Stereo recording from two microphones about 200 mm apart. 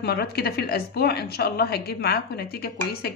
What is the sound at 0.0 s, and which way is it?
A woman's voice, 50° left (ahead or behind).